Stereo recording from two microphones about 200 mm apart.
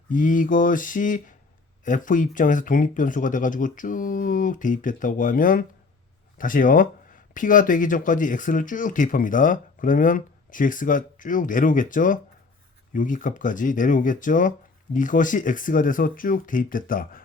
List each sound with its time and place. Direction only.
0.1 s speech: 40° left (ahead or behind)